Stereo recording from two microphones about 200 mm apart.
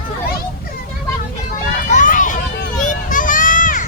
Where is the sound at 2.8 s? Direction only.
40° left (ahead or behind).